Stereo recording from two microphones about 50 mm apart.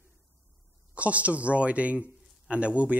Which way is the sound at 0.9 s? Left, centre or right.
Right.